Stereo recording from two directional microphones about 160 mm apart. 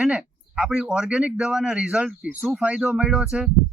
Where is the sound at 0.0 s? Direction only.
5° right (ahead or behind).